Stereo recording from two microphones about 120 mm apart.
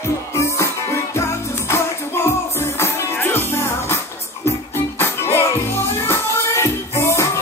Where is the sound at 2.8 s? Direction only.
20° left (ahead or behind).